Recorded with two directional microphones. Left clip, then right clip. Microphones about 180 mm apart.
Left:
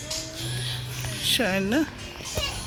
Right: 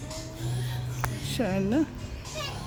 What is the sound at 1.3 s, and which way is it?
Speech, 5° right (ahead or behind).